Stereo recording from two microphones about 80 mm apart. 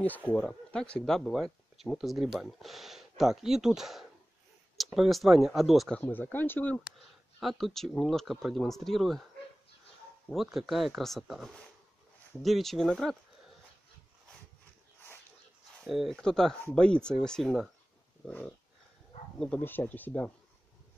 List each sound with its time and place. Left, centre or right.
0.0 s speech: left
0.4 s speech: centre
5.9 s speech: left
7.0 s speech: centre
10.3 s speech: centre
15.8 s speech: centre
19.6 s speech: left